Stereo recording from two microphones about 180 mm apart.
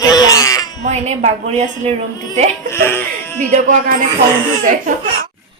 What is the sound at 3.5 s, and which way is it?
Speech, 45° right (ahead or behind).